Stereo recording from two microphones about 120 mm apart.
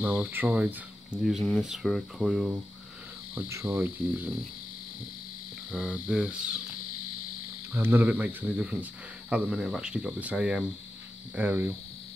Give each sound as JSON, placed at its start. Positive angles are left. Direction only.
{"t": 0.0, "sound": "speech", "side_deg": -15}
{"t": 3.3, "sound": "cricket", "side_deg": -20}
{"t": 3.7, "sound": "speech", "side_deg": -15}
{"t": 5.7, "sound": "speech", "side_deg": -5}
{"t": 7.7, "sound": "speech", "side_deg": -15}
{"t": 11.3, "sound": "speech", "side_deg": -20}